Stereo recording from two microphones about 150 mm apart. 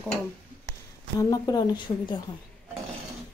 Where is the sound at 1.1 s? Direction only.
25° left (ahead or behind).